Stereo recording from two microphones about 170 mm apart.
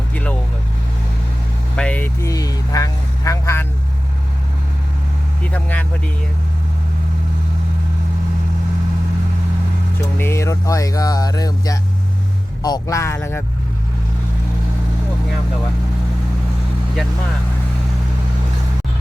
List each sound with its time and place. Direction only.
0.1 s vehicle: 10° left (ahead or behind)
1.7 s speech: 5° left (ahead or behind)
2.3 s speech: 20° left (ahead or behind)
5.4 s speech: 10° left (ahead or behind)
10.2 s speech: 15° left (ahead or behind)